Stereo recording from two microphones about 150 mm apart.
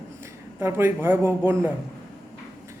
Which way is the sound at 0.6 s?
15° right (ahead or behind).